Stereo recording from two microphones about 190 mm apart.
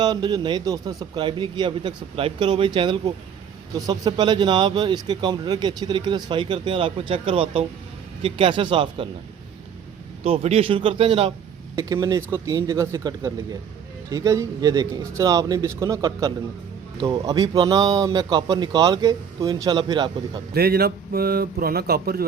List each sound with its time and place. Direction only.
0.0 s speech: 20° right (ahead or behind)
10.2 s speech: 30° right (ahead or behind)
20.5 s speech: 55° right (ahead or behind)